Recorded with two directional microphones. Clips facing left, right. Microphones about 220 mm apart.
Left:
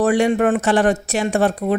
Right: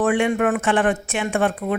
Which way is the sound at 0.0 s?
40° left (ahead or behind).